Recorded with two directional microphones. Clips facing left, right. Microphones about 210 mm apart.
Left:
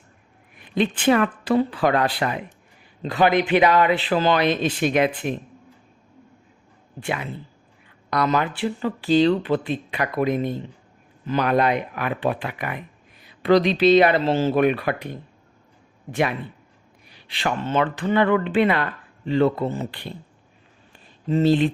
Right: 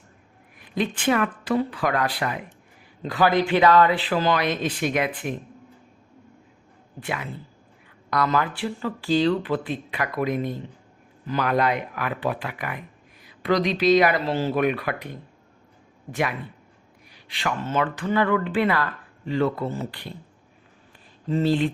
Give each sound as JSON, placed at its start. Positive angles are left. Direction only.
{"t": 0.6, "sound": "speech", "side_deg": 25}
{"t": 8.1, "sound": "speech", "side_deg": 20}
{"t": 17.1, "sound": "speech", "side_deg": 30}
{"t": 21.2, "sound": "speech", "side_deg": 20}